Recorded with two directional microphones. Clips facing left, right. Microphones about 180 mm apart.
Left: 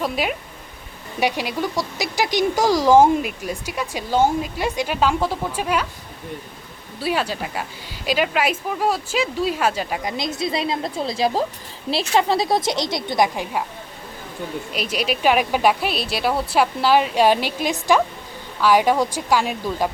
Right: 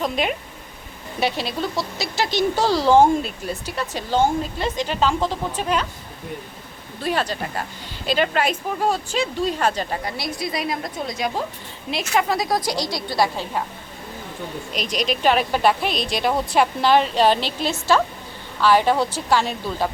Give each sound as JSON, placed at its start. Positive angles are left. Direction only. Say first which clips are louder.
{"t": 0.0, "sound": "speech", "louder": "even", "side_deg": 5}
{"t": 7.0, "sound": "a woman's voice", "louder": "left 1 dB", "side_deg": 10}
{"t": 14.7, "sound": "speech", "louder": "right 1 dB", "side_deg": 5}